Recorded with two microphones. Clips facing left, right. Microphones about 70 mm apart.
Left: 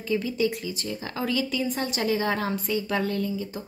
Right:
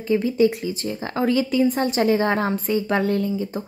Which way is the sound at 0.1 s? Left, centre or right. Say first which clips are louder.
Right 7 dB; right.